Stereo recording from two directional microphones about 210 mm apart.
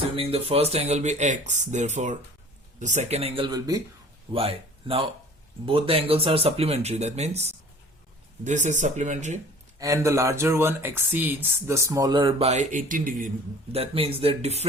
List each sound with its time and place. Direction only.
0.2 s speech: 25° right (ahead or behind)
9.7 s speech: 15° right (ahead or behind); by 13.3 s 40° right (ahead or behind)
13.7 s speech: 25° right (ahead or behind)